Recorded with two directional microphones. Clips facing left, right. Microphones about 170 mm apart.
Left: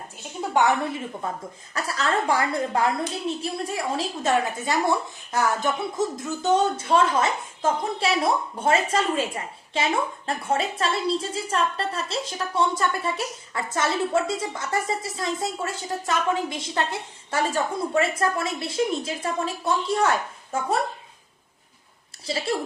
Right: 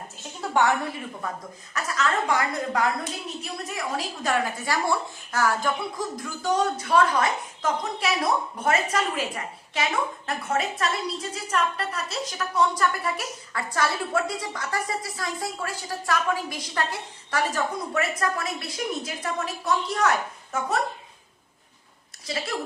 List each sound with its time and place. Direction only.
0.5 s a woman's voice: 20° left (ahead or behind)
22.3 s a woman's voice: 30° left (ahead or behind)